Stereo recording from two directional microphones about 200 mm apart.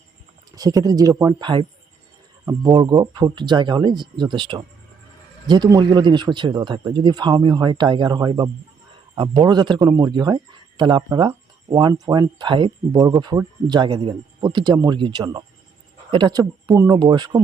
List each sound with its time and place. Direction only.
0.5 s speech: 20° right (ahead or behind)